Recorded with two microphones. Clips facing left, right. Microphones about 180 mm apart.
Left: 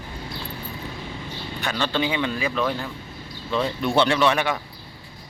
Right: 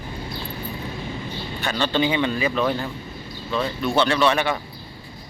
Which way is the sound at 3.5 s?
20° left (ahead or behind).